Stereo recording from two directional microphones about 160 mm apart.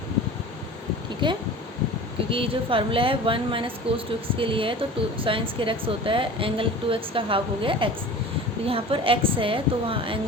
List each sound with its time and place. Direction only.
1.2 s a woman's voice: 30° right (ahead or behind)